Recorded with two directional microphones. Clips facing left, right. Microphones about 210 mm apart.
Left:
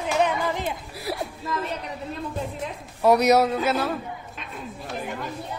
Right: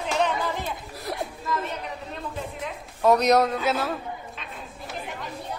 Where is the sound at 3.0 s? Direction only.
10° left (ahead or behind).